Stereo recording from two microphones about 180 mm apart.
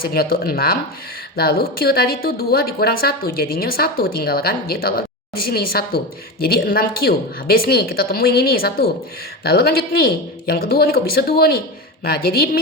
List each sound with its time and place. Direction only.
0.0 s a woman's voice: 55° left (ahead or behind)